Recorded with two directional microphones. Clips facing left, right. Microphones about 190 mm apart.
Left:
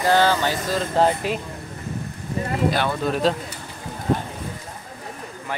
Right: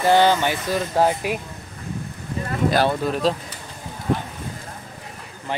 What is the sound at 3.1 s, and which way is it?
Speech, centre (ahead or behind).